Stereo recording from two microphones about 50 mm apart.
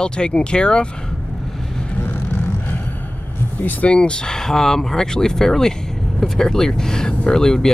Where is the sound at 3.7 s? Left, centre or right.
Left.